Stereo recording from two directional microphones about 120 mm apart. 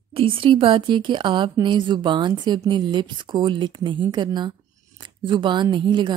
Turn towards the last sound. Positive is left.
turn(degrees=-40)  # may be behind; listen again after turning